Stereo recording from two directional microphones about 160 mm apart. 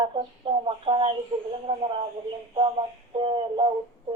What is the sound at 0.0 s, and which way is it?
Speech, 35° right (ahead or behind).